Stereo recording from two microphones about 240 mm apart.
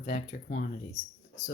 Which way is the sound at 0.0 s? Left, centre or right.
Left.